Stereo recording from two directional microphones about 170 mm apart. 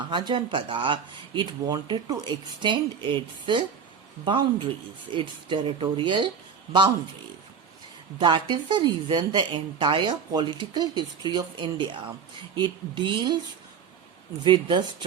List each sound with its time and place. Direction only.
0.1 s a woman's voice: 25° right (ahead or behind)
8.2 s a woman's voice: 25° right (ahead or behind)
14.4 s a woman's voice: 25° right (ahead or behind)